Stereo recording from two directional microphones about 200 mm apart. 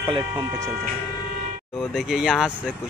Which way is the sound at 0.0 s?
25° right (ahead or behind).